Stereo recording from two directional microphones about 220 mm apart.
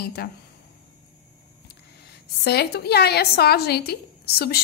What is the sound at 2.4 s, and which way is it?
A woman's voice, 45° left (ahead or behind).